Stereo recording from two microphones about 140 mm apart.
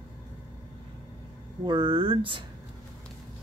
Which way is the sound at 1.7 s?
35° right (ahead or behind).